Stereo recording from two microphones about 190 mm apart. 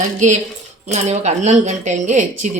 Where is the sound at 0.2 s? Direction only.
40° right (ahead or behind).